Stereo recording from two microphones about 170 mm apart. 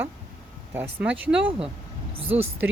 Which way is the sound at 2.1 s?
35° right (ahead or behind).